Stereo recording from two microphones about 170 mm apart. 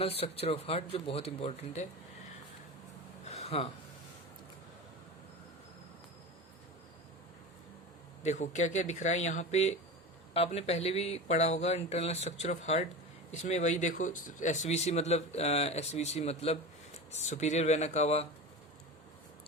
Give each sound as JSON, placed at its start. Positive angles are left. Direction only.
{"t": 0.0, "sound": "speech", "side_deg": 35}
{"t": 3.2, "sound": "a sound", "side_deg": 40}
{"t": 8.2, "sound": "speech", "side_deg": 45}